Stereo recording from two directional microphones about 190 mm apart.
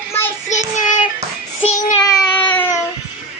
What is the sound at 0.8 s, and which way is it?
Child singing, 45° left (ahead or behind).